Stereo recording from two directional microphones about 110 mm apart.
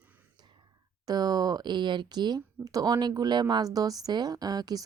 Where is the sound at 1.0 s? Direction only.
35° right (ahead or behind).